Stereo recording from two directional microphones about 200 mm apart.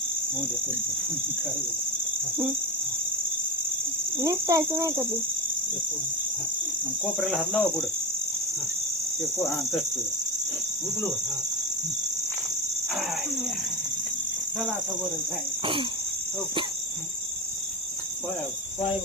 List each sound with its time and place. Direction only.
4.2 s speech: 15° right (ahead or behind)
7.0 s cricket: centre (ahead or behind)